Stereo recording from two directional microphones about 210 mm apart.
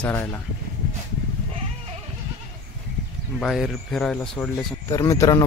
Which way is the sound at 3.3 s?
Centre (ahead or behind).